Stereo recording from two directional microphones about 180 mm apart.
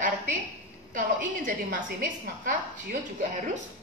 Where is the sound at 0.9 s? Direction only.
45° right (ahead or behind).